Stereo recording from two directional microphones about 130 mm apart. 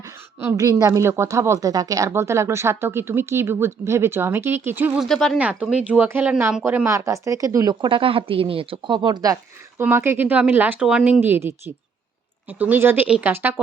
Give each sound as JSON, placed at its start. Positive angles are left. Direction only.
{"t": 0.3, "sound": "a woman's voice", "side_deg": -20}
{"t": 4.9, "sound": "speech", "side_deg": 5}
{"t": 5.4, "sound": "speech", "side_deg": -10}